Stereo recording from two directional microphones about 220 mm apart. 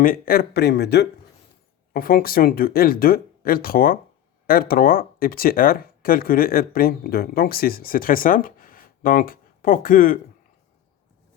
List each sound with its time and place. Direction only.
0.0 s speech: 40° left (ahead or behind)